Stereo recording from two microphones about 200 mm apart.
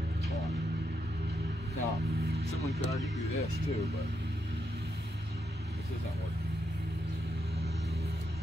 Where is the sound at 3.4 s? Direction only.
30° left (ahead or behind).